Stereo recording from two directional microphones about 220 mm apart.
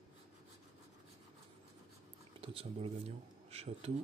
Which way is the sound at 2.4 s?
25° right (ahead or behind).